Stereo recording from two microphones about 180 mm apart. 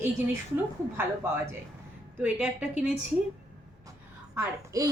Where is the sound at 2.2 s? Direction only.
10° right (ahead or behind).